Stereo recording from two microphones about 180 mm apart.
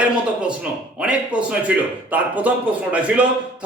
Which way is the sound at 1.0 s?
5° right (ahead or behind).